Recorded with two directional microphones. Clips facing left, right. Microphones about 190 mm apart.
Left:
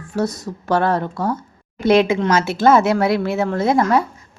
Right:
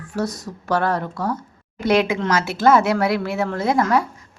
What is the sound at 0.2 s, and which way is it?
Speech, 25° left (ahead or behind).